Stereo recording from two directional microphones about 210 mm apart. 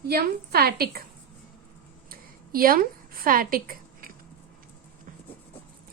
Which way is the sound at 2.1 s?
45° right (ahead or behind).